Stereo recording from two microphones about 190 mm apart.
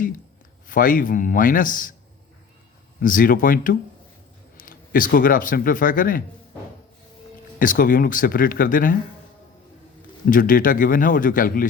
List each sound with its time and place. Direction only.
0.7 s a man's voice: 45° left (ahead or behind)
3.0 s a man's voice: 45° left (ahead or behind)
7.6 s a man's voice: 45° left (ahead or behind)
10.2 s a man's voice: 45° left (ahead or behind)